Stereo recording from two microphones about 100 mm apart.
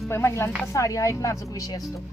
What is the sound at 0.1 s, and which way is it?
A woman's voice, 25° left (ahead or behind).